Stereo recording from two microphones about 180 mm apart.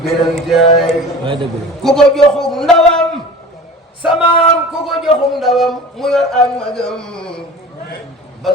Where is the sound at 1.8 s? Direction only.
5° left (ahead or behind).